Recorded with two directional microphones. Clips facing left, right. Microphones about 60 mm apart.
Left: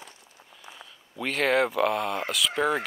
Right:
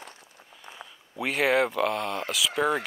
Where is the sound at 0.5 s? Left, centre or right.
Centre.